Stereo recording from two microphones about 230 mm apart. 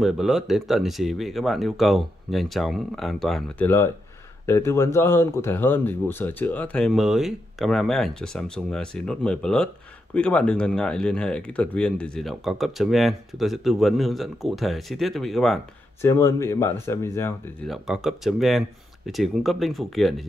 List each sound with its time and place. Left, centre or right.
0.0 s speech: centre
16.0 s speech: centre
17.6 s speech: centre